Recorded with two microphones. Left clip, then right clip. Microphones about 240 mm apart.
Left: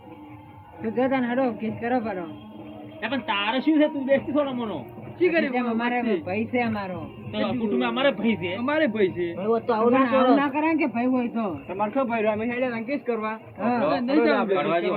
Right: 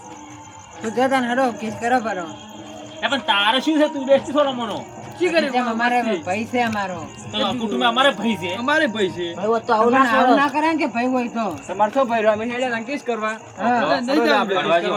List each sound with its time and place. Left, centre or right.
0.8 s a man's voice: centre
5.2 s a man's voice: centre
9.4 s a man's voice: right
9.9 s a man's voice: centre